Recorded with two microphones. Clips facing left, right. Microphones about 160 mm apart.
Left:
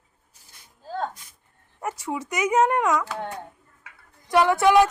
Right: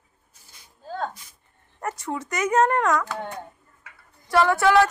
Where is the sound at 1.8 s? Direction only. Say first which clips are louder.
Even; 10° left (ahead or behind).